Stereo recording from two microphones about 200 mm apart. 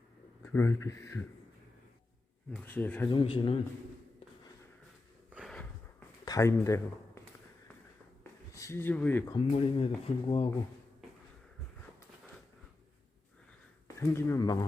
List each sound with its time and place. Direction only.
0.4 s speech: 15° left (ahead or behind)
2.5 s speech: 10° left (ahead or behind)
3.1 s speech: 25° left (ahead or behind)
5.3 s a sound: centre (ahead or behind)
6.2 s speech: 15° left (ahead or behind)
8.5 s speech: 15° left (ahead or behind)
9.3 s speech: 30° left (ahead or behind)
13.8 s speech: 15° left (ahead or behind)